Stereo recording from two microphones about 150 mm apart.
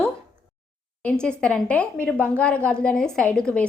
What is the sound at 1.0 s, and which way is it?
A woman's voice, 5° left (ahead or behind).